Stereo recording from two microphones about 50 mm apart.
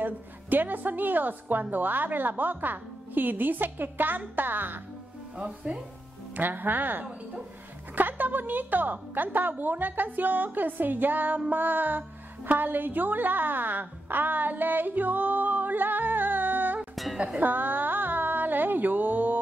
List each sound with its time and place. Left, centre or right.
0.0 s a woman's voice: right
6.3 s a woman's voice: right
16.9 s music: centre
17.4 s a sound: right